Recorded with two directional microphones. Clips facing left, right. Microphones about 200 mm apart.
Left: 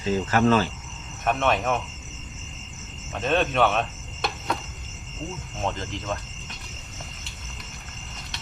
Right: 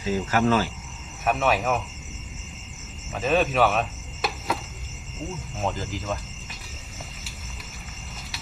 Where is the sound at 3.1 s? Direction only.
5° right (ahead or behind).